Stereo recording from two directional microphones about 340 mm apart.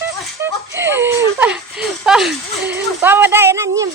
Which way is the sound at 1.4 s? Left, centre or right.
Centre.